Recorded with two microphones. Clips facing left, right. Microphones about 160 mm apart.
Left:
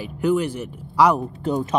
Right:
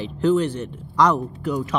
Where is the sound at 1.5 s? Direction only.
25° left (ahead or behind).